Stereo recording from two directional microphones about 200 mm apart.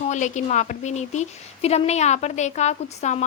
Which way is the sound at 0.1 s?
35° left (ahead or behind).